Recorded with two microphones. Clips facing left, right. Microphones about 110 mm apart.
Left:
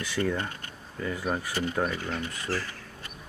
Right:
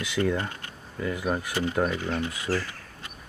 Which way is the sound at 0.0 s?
15° right (ahead or behind).